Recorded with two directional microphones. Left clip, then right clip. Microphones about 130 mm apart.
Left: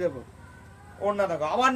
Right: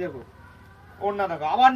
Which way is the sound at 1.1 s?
40° left (ahead or behind).